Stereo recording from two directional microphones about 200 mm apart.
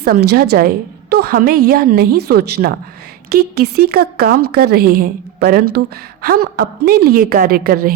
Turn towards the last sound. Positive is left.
turn(degrees=-50)  # may be behind; listen again after turning